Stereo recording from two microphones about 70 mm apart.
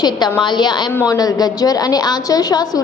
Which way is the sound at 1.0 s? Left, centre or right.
Left.